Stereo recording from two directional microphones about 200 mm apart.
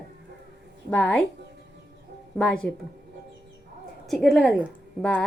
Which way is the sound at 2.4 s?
5° left (ahead or behind).